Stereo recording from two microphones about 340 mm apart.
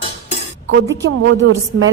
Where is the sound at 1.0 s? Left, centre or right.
Right.